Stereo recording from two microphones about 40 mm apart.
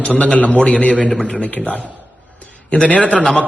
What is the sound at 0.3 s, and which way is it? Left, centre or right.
Speech, left.